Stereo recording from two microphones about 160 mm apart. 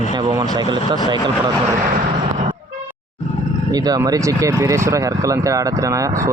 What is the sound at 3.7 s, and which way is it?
Speech, 25° right (ahead or behind).